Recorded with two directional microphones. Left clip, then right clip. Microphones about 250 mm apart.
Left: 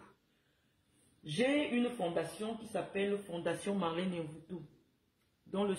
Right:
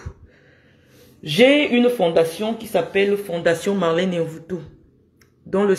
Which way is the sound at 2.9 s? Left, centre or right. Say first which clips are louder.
Right 17 dB; centre.